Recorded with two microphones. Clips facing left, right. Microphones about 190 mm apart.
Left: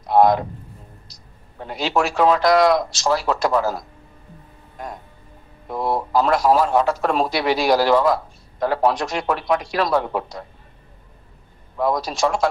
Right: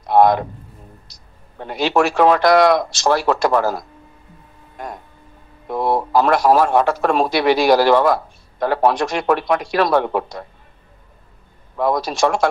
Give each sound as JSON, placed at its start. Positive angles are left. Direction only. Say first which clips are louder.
{"t": 0.1, "sound": "speech", "louder": "right 2 dB", "side_deg": -65}
{"t": 1.6, "sound": "speech", "louder": "right 4 dB", "side_deg": -65}
{"t": 5.7, "sound": "speech", "louder": "right 3 dB", "side_deg": -65}
{"t": 11.7, "sound": "speech", "louder": "right 2 dB", "side_deg": -65}